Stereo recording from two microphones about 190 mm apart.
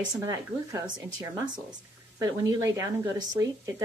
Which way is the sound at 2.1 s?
15° right (ahead or behind).